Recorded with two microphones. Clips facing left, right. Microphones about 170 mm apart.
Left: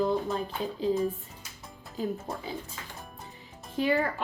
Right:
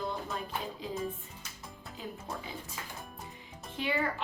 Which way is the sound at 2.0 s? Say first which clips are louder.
Left 11 dB; 40° left (ahead or behind).